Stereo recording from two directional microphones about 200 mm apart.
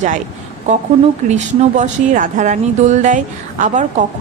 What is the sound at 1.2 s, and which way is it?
Speech, 35° right (ahead or behind).